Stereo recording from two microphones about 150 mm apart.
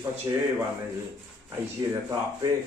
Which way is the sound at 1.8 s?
25° right (ahead or behind).